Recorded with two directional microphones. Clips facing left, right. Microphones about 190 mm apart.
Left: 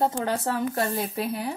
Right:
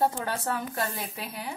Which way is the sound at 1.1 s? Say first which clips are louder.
Left 9 dB; 30° left (ahead or behind).